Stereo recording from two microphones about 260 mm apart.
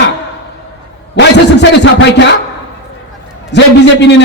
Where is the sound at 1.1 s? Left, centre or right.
Left.